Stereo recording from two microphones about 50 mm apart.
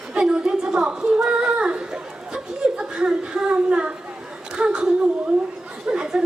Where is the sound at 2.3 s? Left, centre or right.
Centre.